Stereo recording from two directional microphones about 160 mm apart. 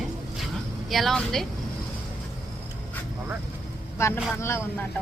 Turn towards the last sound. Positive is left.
turn(degrees=15)  # may be behind; listen again after turning